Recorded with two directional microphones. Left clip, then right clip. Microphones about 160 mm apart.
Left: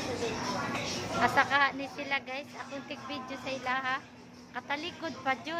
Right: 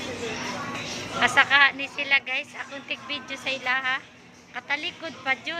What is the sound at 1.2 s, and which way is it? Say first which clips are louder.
A woman's voice: right 8 dB; 15° left (ahead or behind).